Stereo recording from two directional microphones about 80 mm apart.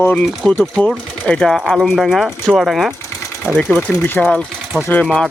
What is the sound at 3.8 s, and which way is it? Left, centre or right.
Speech, left.